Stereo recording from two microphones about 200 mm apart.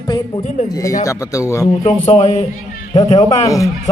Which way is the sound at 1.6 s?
35° left (ahead or behind).